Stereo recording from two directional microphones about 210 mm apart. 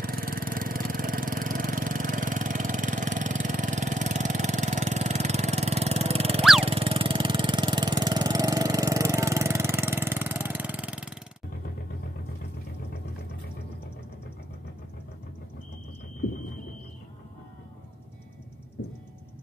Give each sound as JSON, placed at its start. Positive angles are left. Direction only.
{"t": 0.0, "sound": "vehicle", "side_deg": -45}